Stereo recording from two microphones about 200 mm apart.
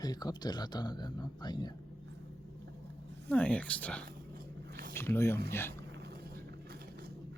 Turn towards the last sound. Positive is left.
turn(degrees=10)  # may be behind; listen again after turning